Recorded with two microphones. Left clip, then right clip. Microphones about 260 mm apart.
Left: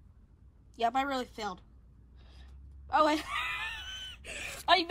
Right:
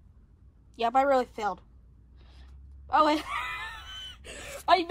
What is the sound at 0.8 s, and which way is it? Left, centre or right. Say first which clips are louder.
Speech: right 7 dB; centre.